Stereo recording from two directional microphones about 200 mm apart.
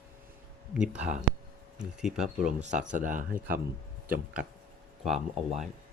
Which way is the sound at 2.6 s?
40° right (ahead or behind).